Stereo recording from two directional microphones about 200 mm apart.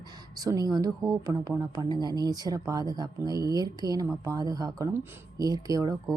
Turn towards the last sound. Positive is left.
turn(degrees=-15)  # may be behind; listen again after turning